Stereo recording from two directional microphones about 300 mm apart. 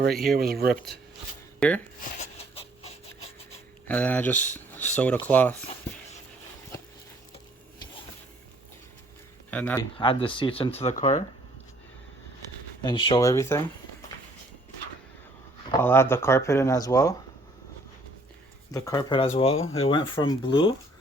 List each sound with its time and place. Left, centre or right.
0.1 s speech: centre
0.3 s speech: right
1.5 s speech: centre
2.2 s a sound: left
3.8 s speech: centre
9.5 s speech: centre
10.0 s speech: centre
12.8 s speech: centre
15.7 s speech: centre
18.7 s speech: centre